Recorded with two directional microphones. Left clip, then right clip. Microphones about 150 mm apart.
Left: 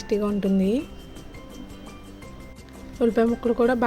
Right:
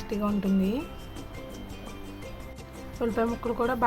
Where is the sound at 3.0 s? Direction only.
45° left (ahead or behind).